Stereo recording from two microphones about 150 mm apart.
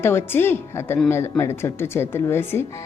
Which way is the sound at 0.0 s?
15° left (ahead or behind).